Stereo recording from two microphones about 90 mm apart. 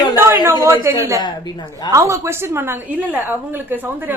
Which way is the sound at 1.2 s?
55° left (ahead or behind).